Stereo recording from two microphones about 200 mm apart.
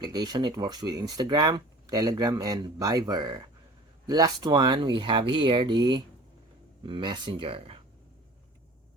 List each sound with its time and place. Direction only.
0.0 s speech: 20° right (ahead or behind)